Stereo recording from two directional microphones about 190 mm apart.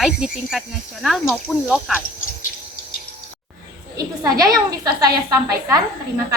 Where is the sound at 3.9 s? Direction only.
20° right (ahead or behind).